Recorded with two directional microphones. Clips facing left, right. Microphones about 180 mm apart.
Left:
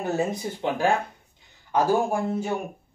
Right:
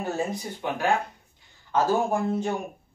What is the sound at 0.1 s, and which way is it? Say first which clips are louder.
Speech: left 3 dB; 25° left (ahead or behind).